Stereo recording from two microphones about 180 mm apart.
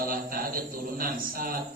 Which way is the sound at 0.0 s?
55° right (ahead or behind).